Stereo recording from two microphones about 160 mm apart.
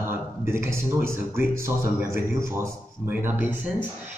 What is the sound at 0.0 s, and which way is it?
Speech, 15° right (ahead or behind).